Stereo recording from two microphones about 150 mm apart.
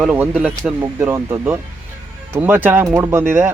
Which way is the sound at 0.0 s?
10° right (ahead or behind).